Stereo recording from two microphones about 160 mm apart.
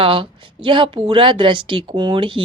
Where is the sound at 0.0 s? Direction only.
35° right (ahead or behind).